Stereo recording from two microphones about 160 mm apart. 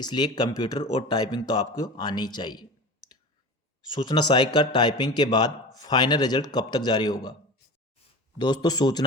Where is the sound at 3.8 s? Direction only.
25° left (ahead or behind).